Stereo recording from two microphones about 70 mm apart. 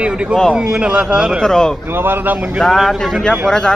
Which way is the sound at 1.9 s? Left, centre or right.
Right.